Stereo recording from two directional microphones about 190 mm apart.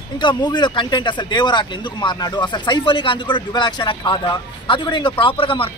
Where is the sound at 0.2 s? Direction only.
25° left (ahead or behind).